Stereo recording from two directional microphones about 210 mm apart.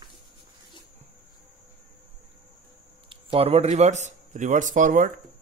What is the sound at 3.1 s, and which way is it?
A man's voice, 25° right (ahead or behind).